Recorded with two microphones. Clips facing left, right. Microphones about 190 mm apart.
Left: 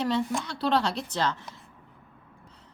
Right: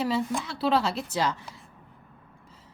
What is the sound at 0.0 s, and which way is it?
A woman's voice, 5° right (ahead or behind).